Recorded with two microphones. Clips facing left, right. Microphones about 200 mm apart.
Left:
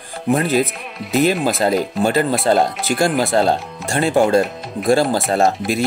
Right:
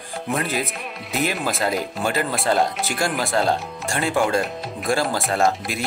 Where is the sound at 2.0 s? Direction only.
Centre (ahead or behind).